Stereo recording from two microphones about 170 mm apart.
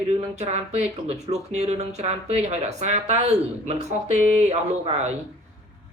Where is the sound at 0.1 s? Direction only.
40° right (ahead or behind).